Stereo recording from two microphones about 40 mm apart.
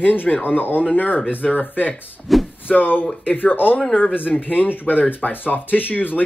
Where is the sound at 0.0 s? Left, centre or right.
Left.